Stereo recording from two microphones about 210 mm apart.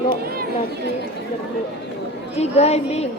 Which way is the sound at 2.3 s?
30° left (ahead or behind).